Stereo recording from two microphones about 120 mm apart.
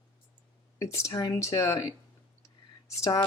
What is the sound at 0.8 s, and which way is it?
Speech, 25° left (ahead or behind).